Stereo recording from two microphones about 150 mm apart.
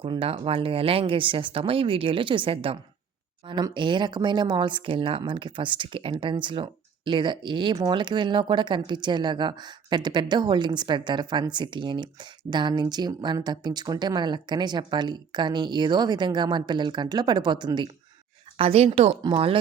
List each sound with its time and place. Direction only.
0.0 s speech: 40° right (ahead or behind)
18.5 s speech: 40° right (ahead or behind)